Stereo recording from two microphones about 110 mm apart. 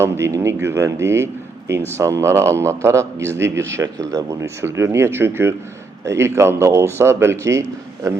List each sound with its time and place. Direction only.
0.0 s a man's voice: 25° right (ahead or behind)